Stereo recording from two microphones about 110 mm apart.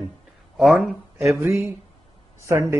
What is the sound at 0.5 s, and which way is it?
Speech, centre (ahead or behind).